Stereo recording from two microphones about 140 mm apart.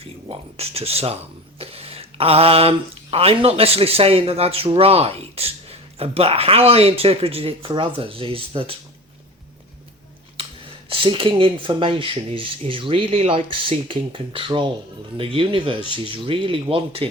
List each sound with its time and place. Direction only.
0.0 s speech: 45° right (ahead or behind)
10.8 s speech: 40° right (ahead or behind)